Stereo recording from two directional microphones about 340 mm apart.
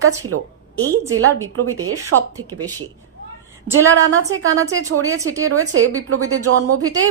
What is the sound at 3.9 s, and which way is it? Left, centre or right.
A woman's voice, right.